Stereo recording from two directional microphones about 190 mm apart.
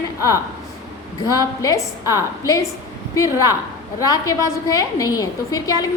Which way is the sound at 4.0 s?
20° left (ahead or behind).